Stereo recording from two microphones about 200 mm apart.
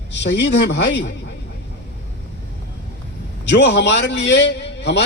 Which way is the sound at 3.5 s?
60° left (ahead or behind).